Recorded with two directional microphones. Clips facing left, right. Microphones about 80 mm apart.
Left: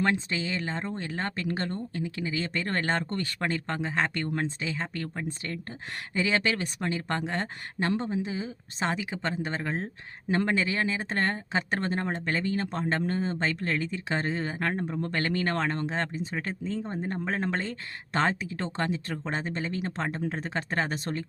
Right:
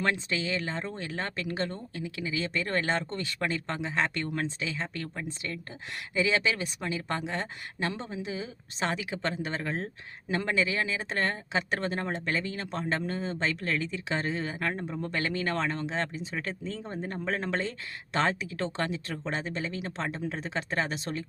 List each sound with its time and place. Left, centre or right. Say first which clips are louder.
0.0 s speech: left 2 dB; left
14.7 s speech: left 3 dB; left
15.0 s speech: left 1 dB; left